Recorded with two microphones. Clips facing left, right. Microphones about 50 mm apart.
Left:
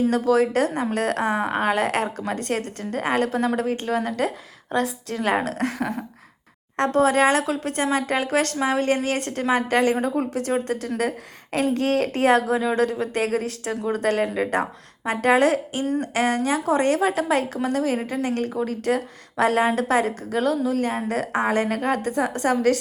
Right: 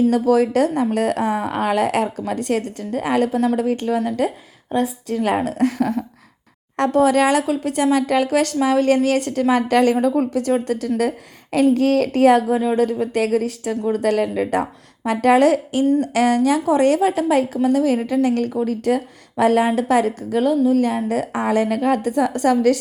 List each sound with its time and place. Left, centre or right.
0.1 s speech: left
4.7 s a woman's voice: left
5.5 s a woman's voice: left
8.5 s a woman's voice: left
12.5 s a woman's voice: left
17.2 s a woman's voice: left
17.8 s a woman's voice: left